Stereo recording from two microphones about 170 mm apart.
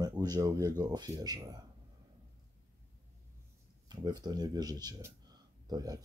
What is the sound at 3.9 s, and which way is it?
Speech, 25° right (ahead or behind).